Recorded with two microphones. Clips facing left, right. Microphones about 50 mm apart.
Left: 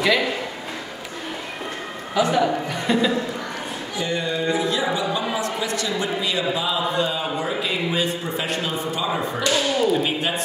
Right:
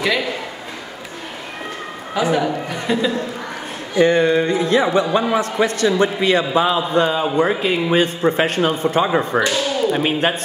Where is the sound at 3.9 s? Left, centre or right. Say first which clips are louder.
Right 11 dB; right.